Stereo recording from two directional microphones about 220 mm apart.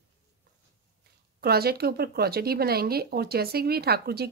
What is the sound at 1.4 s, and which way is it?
Speech, 45° right (ahead or behind).